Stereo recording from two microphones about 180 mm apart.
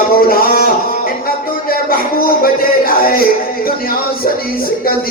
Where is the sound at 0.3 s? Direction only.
55° left (ahead or behind).